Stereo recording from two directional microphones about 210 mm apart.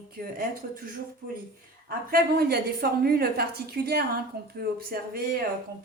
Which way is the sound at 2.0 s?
45° right (ahead or behind).